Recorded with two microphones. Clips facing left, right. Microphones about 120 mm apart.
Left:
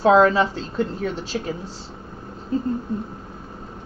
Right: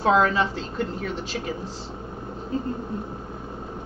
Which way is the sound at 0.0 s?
40° left (ahead or behind).